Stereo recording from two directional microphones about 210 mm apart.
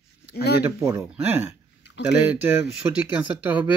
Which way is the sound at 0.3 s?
50° left (ahead or behind).